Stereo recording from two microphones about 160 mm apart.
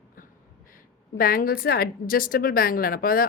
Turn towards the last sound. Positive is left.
turn(degrees=65)  # may be behind; listen again after turning